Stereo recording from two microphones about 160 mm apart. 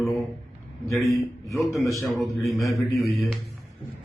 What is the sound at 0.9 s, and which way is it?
Speech, centre (ahead or behind).